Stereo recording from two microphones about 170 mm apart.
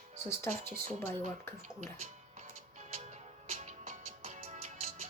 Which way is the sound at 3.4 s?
40° right (ahead or behind).